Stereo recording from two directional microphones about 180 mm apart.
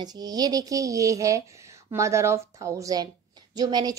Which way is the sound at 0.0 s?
20° right (ahead or behind).